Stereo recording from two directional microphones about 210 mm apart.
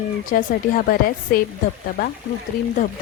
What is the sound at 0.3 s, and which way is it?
Speech, 40° left (ahead or behind).